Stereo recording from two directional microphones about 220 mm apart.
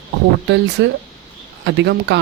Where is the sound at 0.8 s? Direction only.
55° right (ahead or behind).